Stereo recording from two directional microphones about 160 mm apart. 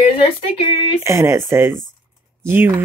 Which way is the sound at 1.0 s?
20° right (ahead or behind).